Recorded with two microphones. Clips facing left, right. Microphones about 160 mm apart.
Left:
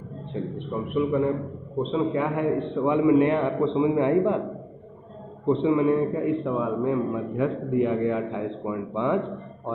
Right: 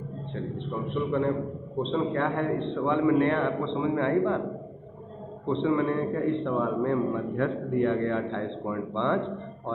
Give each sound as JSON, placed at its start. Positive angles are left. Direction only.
{"t": 0.9, "sound": "a man's voice", "side_deg": 5}
{"t": 5.5, "sound": "a man's voice", "side_deg": 20}
{"t": 6.2, "sound": "a man's voice", "side_deg": 0}